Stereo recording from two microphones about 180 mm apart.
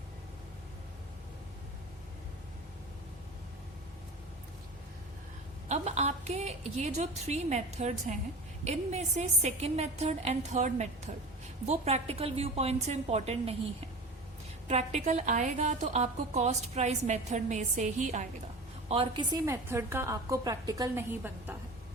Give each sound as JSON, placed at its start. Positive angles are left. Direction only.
{"t": 5.6, "sound": "a woman's voice", "side_deg": -40}
{"t": 14.7, "sound": "a woman's voice", "side_deg": -40}
{"t": 18.9, "sound": "a woman's voice", "side_deg": -30}
{"t": 19.6, "sound": "a woman's voice", "side_deg": -15}